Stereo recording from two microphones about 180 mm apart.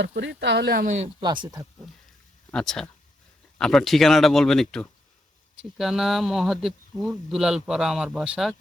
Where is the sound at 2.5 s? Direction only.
5° left (ahead or behind).